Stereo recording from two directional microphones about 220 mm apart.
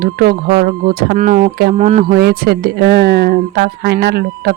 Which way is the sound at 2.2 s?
45° right (ahead or behind).